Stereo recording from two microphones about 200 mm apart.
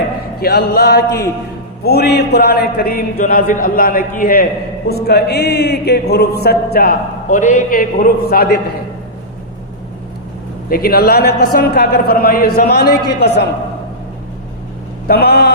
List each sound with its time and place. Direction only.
0.3 s mantra: 50° left (ahead or behind)
10.7 s mantra: 50° left (ahead or behind)
15.0 s mantra: 50° left (ahead or behind)